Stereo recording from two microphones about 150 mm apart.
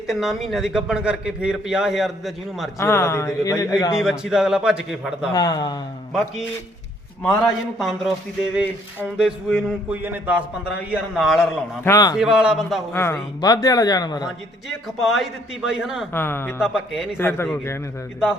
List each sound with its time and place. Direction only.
0.1 s a man's voice: centre (ahead or behind)
2.7 s a man's voice: 20° left (ahead or behind)
3.9 s a man's voice: 5° right (ahead or behind)
5.3 s a man's voice: 25° left (ahead or behind)
7.2 s a man's voice: 5° left (ahead or behind)
10.9 s a man's voice: centre (ahead or behind)
11.8 s a man's voice: 20° left (ahead or behind)
12.1 s a man's voice: 5° right (ahead or behind)
12.9 s a man's voice: 15° left (ahead or behind)
15.0 s a man's voice: centre (ahead or behind)
16.1 s speech: 15° left (ahead or behind)
16.6 s a man's voice: 5° right (ahead or behind)
17.2 s speech: 15° left (ahead or behind)